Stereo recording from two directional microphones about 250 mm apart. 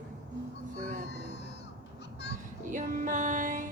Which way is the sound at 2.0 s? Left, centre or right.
Left.